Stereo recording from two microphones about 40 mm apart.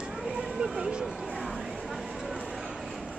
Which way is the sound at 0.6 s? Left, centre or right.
Right.